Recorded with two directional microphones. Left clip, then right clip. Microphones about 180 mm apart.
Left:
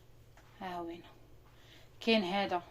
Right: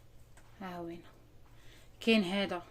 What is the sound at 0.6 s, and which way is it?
Speech, 35° right (ahead or behind).